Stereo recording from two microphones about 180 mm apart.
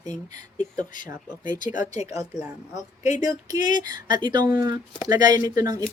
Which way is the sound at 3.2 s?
20° right (ahead or behind).